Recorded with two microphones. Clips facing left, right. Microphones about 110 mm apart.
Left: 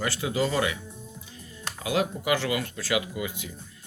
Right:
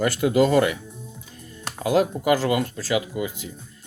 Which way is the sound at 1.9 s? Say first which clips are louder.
Right 6 dB; 40° right (ahead or behind).